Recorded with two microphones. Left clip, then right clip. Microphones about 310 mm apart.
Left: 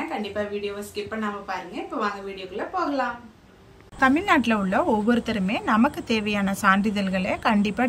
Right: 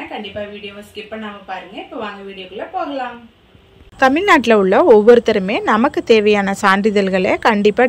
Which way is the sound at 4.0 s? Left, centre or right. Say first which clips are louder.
Right 8 dB; centre.